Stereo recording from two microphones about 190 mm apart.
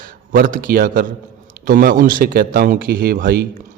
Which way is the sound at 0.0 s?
45° right (ahead or behind).